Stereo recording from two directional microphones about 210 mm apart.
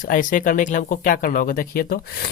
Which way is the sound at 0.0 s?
40° left (ahead or behind).